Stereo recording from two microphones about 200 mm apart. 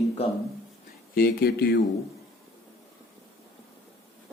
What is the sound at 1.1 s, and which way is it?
Speech, 50° left (ahead or behind).